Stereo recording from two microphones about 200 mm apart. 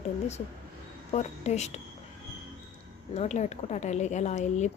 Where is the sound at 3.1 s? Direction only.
35° left (ahead or behind).